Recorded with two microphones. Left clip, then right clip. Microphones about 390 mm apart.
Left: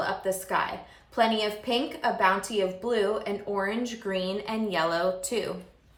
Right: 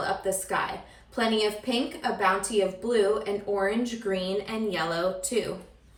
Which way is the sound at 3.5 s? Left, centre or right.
Centre.